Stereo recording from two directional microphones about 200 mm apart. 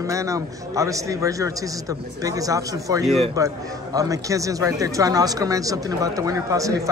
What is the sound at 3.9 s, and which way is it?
Speech, 15° right (ahead or behind).